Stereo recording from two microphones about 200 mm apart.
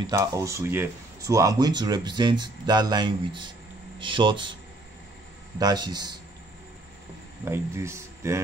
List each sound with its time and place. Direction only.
0.0 s speech: 15° right (ahead or behind)
5.6 s speech: 20° right (ahead or behind)
7.4 s speech: 15° right (ahead or behind)